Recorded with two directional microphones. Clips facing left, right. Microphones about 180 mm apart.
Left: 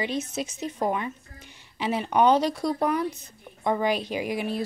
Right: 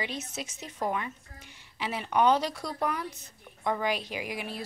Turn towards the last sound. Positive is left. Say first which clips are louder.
# left 8 dB
turn(degrees=25)  # may be behind; listen again after turning